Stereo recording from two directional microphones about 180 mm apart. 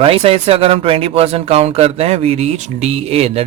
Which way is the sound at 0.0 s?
30° right (ahead or behind).